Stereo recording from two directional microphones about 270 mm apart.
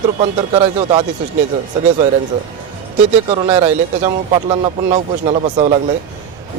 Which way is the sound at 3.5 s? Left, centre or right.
Centre.